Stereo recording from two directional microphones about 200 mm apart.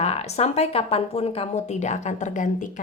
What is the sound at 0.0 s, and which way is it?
A woman's voice, 30° left (ahead or behind).